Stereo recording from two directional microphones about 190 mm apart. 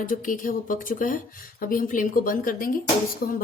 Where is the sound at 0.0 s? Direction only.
45° left (ahead or behind).